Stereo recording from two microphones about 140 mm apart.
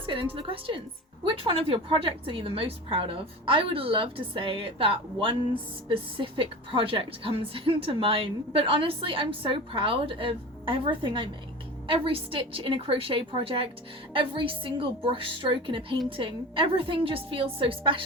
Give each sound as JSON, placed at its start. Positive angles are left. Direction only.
{"t": 0.0, "sound": "a woman's voice", "side_deg": -35}